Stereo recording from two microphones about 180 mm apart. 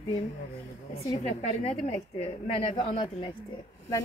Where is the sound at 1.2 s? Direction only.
35° left (ahead or behind).